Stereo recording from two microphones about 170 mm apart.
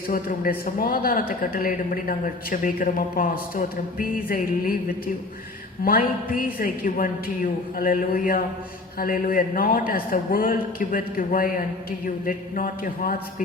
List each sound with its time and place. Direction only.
0.1 s a man's voice: 55° left (ahead or behind)
5.8 s a man's voice: 55° left (ahead or behind)